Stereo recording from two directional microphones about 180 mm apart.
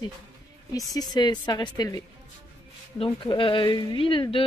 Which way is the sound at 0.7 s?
20° left (ahead or behind).